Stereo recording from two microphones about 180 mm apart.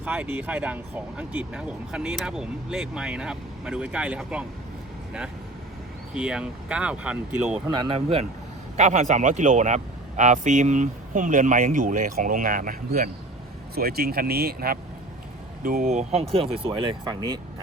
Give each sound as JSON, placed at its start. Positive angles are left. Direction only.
{"t": 0.0, "sound": "speech", "side_deg": -10}
{"t": 6.1, "sound": "speech", "side_deg": -5}
{"t": 7.8, "sound": "speech", "side_deg": -30}